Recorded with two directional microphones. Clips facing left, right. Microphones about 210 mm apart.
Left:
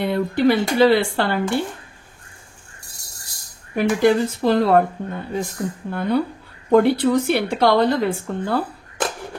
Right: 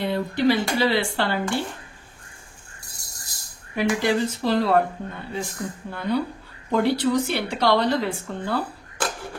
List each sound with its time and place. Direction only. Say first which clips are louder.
0.0 s speech: left 4 dB; 55° left (ahead or behind)
3.7 s speech: left 5 dB; 50° left (ahead or behind)